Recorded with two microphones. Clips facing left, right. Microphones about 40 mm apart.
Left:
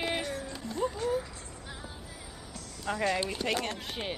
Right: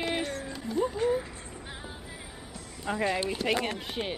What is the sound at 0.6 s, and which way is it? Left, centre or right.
Speech, centre.